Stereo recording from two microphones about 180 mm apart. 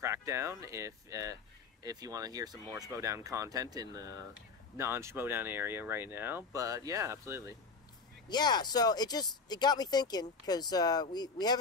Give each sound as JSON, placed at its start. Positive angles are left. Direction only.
{"t": 0.0, "sound": "speech", "side_deg": -15}
{"t": 8.3, "sound": "speech", "side_deg": 25}